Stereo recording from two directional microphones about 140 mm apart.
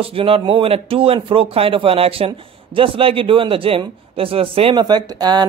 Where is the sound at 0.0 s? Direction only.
40° right (ahead or behind).